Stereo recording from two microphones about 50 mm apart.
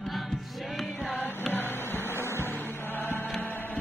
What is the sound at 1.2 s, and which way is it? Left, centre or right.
Vehicle, left.